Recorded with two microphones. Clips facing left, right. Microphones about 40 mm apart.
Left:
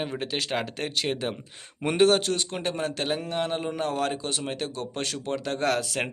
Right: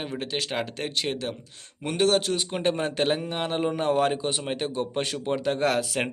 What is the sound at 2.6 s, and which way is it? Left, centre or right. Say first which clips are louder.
Speech: right 4 dB; right.